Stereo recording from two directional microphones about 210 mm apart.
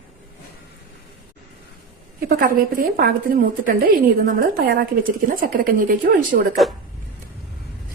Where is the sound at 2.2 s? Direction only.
40° right (ahead or behind).